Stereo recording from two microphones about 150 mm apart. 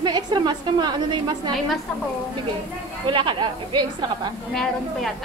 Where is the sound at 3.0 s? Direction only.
30° right (ahead or behind).